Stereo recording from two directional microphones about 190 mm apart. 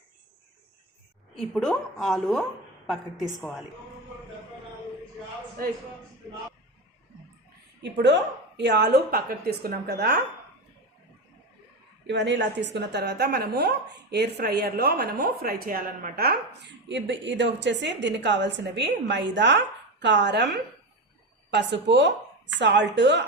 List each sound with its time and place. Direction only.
1.4 s a woman's voice: centre (ahead or behind)
7.8 s a woman's voice: 65° right (ahead or behind)
12.0 s a woman's voice: 65° right (ahead or behind)